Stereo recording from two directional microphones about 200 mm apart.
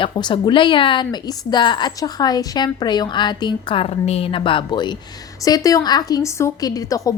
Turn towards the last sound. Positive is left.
turn(degrees=15)  # may be behind; listen again after turning